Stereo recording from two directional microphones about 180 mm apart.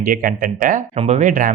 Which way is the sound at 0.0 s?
55° right (ahead or behind).